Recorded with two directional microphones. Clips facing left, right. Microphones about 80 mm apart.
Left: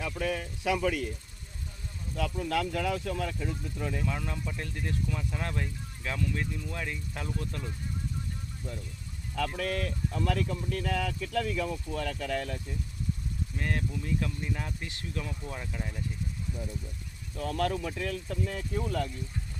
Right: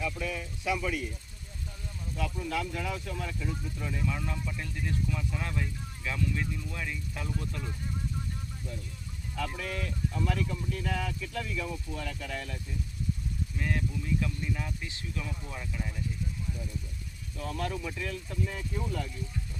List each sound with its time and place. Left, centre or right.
0.0 s speech: left
2.1 s speech: left
3.8 s speech: left
9.3 s speech: left
13.6 s speech: left
17.3 s speech: left